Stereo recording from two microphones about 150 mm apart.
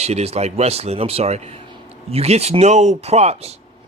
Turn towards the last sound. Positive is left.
turn(degrees=-45)  # may be behind; listen again after turning